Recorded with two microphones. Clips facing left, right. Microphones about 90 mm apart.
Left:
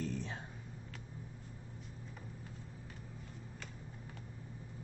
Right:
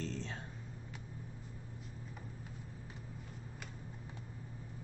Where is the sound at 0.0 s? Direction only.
10° left (ahead or behind).